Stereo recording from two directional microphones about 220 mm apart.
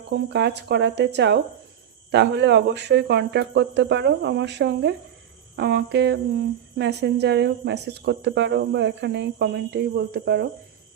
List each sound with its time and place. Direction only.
0.1 s speech: 50° right (ahead or behind)